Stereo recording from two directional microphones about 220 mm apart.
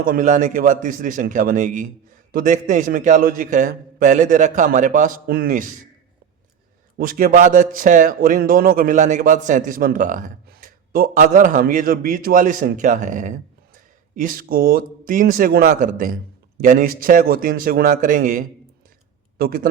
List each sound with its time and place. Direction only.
0.0 s a man's voice: 35° right (ahead or behind)
7.0 s a man's voice: 40° right (ahead or behind)